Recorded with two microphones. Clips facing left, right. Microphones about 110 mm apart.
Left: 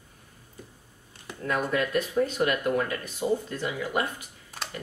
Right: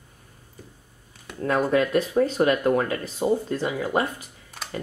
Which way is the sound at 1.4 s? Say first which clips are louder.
Right 6 dB; 30° right (ahead or behind).